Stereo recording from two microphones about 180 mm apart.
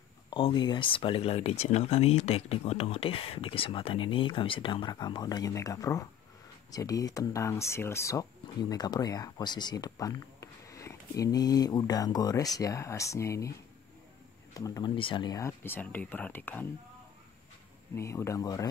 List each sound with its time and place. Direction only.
0.3 s speech: 30° left (ahead or behind)
14.5 s speech: 20° left (ahead or behind)
17.9 s speech: 15° left (ahead or behind)